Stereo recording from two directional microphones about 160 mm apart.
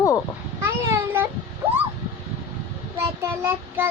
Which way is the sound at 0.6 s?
15° right (ahead or behind).